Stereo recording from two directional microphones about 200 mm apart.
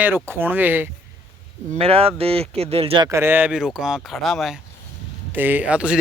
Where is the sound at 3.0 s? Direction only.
15° right (ahead or behind).